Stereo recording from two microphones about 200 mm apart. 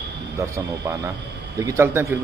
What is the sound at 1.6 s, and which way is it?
Speech, 15° right (ahead or behind).